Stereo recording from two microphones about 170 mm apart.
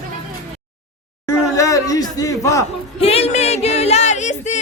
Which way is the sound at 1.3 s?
20° left (ahead or behind).